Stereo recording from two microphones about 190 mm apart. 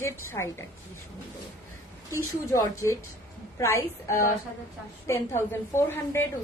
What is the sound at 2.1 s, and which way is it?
A woman's voice, 15° left (ahead or behind).